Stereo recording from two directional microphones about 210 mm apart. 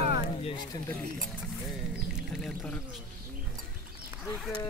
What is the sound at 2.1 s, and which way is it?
Speech, 5° left (ahead or behind).